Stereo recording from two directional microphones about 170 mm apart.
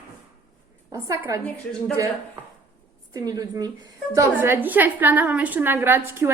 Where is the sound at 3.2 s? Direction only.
20° right (ahead or behind).